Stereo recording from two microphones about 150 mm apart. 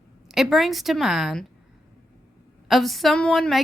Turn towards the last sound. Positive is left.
turn(degrees=0)  # may be behind; listen again after turning